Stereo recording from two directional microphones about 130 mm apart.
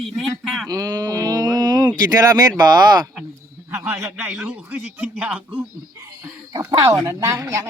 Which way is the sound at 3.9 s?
20° right (ahead or behind).